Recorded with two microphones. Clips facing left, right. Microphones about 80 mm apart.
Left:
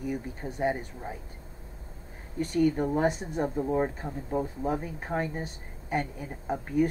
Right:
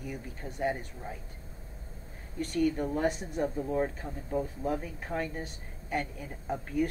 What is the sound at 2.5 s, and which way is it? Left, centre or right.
Speech, left.